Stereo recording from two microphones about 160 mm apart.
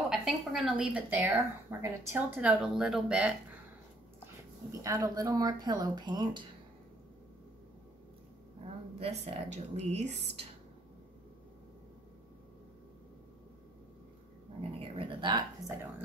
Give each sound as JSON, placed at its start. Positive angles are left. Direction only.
{"t": 0.1, "sound": "a woman's voice", "side_deg": -5}
{"t": 4.8, "sound": "speech", "side_deg": -20}
{"t": 9.0, "sound": "a woman's voice", "side_deg": -40}
{"t": 14.6, "sound": "speech", "side_deg": -35}